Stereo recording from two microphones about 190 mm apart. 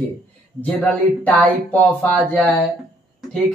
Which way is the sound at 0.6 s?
10° left (ahead or behind).